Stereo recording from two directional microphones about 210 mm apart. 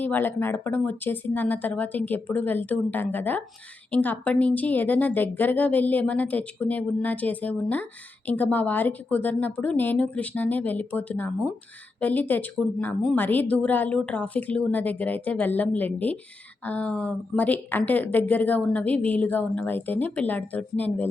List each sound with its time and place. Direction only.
0.0 s speech: 10° left (ahead or behind)